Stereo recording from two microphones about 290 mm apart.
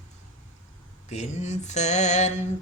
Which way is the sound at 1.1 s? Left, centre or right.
Left.